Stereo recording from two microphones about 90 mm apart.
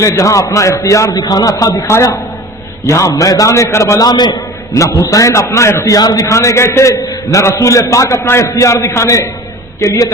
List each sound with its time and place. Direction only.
0.0 s a man's voice: 35° left (ahead or behind)
4.7 s a man's voice: 35° left (ahead or behind)